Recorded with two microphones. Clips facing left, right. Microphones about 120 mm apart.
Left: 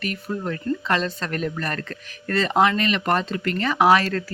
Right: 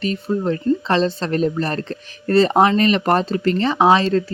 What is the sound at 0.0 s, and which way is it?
Speech, 25° right (ahead or behind).